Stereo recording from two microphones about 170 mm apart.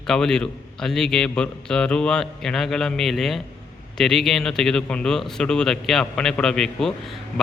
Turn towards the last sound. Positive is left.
turn(degrees=0)  # may be behind; listen again after turning